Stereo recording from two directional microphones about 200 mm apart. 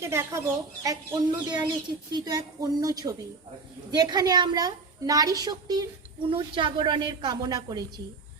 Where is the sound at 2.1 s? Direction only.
20° right (ahead or behind).